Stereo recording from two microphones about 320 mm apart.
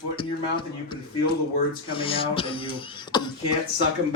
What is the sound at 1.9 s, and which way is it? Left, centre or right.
Speech, centre.